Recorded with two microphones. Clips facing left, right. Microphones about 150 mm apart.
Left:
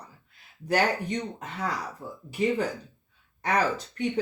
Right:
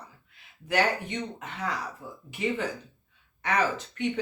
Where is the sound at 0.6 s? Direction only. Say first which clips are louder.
Left 1 dB; 40° left (ahead or behind).